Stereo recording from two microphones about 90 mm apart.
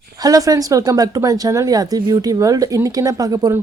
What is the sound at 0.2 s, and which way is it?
Speech, 40° right (ahead or behind).